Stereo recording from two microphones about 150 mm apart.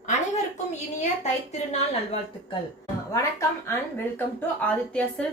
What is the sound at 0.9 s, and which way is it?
Speech, 50° left (ahead or behind).